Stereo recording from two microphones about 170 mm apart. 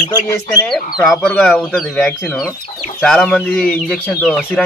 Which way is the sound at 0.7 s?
Centre (ahead or behind).